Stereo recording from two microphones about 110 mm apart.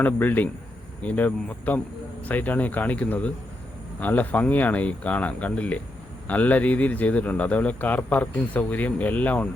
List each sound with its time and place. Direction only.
0.0 s speech: 15° left (ahead or behind)